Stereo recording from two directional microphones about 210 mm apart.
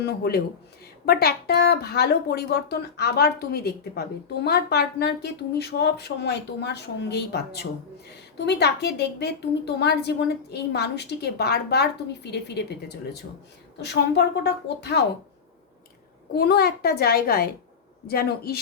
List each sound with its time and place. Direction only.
0.0 s speech: 50° left (ahead or behind)
13.8 s speech: 50° left (ahead or behind)
16.3 s speech: 50° left (ahead or behind)